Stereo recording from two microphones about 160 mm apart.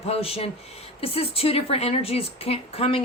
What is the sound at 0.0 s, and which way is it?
A woman's voice, 40° left (ahead or behind).